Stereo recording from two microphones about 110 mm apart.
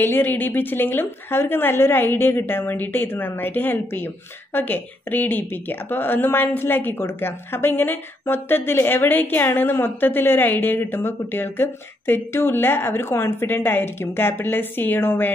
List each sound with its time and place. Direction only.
0.0 s a woman's voice: 20° left (ahead or behind)